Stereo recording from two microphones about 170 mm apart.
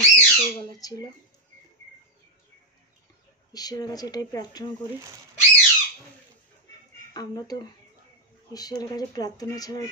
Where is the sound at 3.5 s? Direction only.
20° left (ahead or behind).